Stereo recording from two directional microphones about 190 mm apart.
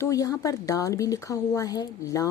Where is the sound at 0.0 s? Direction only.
15° left (ahead or behind).